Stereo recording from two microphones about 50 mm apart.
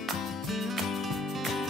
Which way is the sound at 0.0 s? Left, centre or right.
Centre.